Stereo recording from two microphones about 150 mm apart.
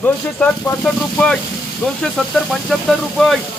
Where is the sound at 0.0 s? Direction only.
5° left (ahead or behind).